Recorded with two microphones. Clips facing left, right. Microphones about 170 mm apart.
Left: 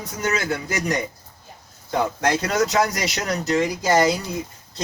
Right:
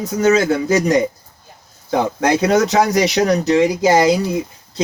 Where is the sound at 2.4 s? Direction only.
70° right (ahead or behind).